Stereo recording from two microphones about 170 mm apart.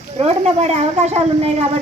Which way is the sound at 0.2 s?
40° right (ahead or behind).